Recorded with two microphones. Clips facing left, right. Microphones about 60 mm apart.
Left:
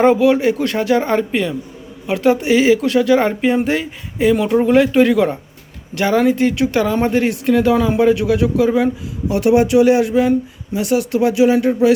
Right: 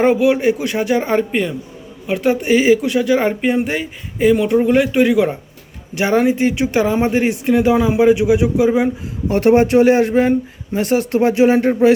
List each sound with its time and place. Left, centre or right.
0.0 s speech: centre
5.9 s a man's voice: centre
9.3 s speech: right